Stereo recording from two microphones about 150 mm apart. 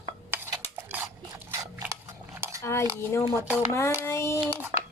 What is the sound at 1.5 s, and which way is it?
Biting, 20° right (ahead or behind).